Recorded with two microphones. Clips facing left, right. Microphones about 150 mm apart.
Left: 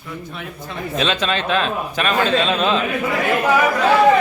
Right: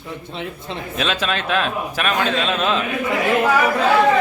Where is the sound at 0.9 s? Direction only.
5° right (ahead or behind).